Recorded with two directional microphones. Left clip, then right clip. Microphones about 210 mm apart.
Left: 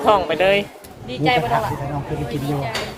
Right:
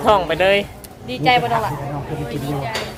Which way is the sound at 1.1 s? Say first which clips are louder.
Right 3 dB; 55° right (ahead or behind).